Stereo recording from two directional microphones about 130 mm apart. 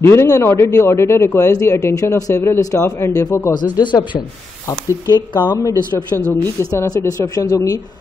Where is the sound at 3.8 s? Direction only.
35° left (ahead or behind).